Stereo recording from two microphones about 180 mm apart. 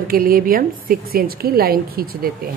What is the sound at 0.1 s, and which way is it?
A woman's voice, 55° right (ahead or behind).